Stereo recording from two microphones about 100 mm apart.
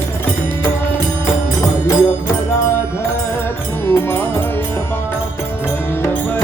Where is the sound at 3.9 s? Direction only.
25° left (ahead or behind).